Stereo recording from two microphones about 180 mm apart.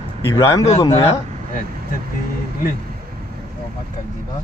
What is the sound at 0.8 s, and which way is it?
Speech, 30° left (ahead or behind).